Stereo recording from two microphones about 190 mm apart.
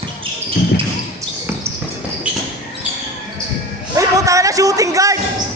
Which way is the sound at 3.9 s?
15° right (ahead or behind).